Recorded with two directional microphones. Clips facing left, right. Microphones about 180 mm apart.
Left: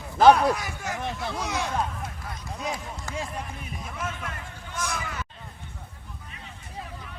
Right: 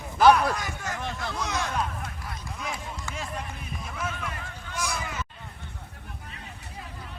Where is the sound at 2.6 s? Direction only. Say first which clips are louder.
Left 4 dB; 35° left (ahead or behind).